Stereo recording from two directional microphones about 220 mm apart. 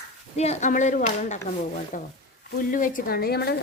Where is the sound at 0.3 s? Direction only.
30° left (ahead or behind).